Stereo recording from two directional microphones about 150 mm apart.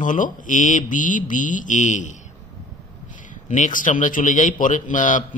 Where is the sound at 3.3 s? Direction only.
60° left (ahead or behind).